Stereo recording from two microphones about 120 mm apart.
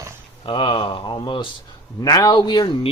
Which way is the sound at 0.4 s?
45° left (ahead or behind).